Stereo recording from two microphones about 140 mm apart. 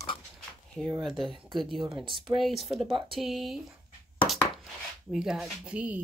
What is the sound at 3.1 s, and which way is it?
Speech, centre (ahead or behind).